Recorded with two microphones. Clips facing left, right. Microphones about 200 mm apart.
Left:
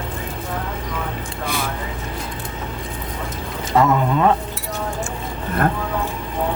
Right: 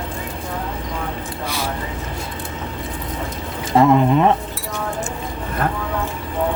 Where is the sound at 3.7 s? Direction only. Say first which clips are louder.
Right 4 dB; 25° right (ahead or behind).